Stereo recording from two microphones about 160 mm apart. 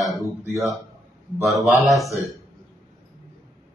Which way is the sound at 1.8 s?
Centre (ahead or behind).